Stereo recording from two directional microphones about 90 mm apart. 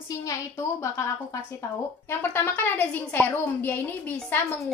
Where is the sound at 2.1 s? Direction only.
25° left (ahead or behind).